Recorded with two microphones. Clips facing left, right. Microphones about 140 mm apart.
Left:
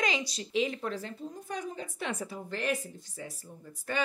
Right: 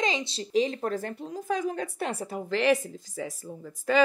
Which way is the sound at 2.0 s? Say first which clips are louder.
Right 4 dB; 35° right (ahead or behind).